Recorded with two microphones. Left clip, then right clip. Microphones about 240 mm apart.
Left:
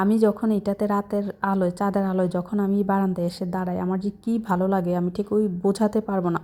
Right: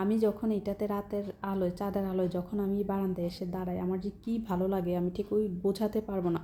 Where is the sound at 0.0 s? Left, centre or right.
Left.